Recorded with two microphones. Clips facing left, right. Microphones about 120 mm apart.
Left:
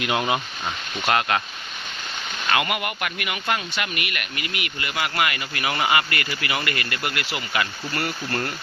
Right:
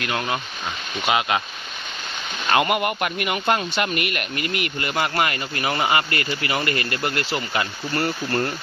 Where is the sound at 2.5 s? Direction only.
30° right (ahead or behind).